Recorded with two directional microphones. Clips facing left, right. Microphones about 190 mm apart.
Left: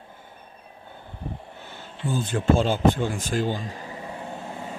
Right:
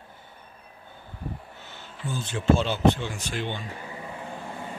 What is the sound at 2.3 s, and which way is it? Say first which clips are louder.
Speech: left 1 dB; 45° left (ahead or behind).